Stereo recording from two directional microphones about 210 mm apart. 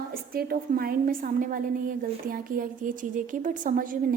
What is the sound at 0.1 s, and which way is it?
A woman's voice, 45° right (ahead or behind).